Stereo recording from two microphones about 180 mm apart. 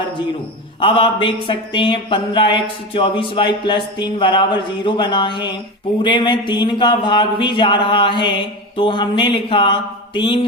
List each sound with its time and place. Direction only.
0.8 s speech: 30° left (ahead or behind)